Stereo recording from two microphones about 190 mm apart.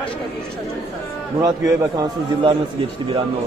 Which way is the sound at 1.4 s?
20° right (ahead or behind).